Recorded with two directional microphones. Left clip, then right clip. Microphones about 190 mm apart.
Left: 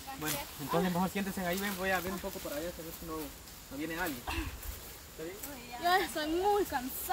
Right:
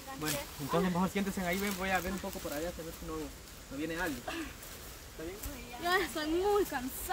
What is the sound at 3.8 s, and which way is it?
Speech, 5° right (ahead or behind).